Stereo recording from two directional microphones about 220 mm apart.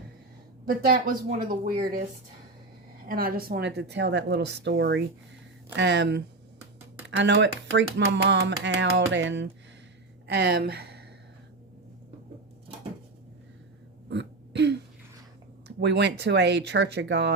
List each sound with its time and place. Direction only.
0.6 s a woman's voice: 40° right (ahead or behind)
3.1 s speech: 40° right (ahead or behind)
14.1 s throat clearing: 50° right (ahead or behind)
15.6 s speech: 50° right (ahead or behind)